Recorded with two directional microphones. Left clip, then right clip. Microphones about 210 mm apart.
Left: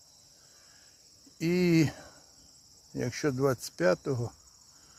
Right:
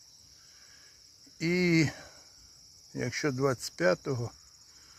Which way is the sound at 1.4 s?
10° left (ahead or behind).